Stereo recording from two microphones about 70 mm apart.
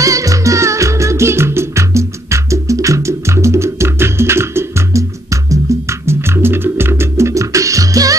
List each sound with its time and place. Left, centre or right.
0.0 s music: right